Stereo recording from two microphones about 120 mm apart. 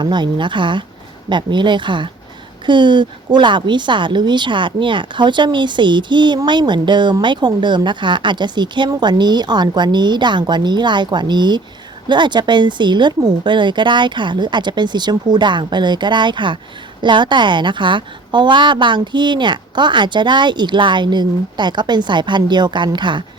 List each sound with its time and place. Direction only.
0.0 s a woman's voice: 40° right (ahead or behind)